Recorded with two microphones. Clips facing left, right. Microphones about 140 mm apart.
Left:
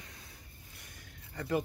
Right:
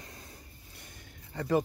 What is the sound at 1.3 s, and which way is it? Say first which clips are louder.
Speech: right 5 dB; 40° right (ahead or behind).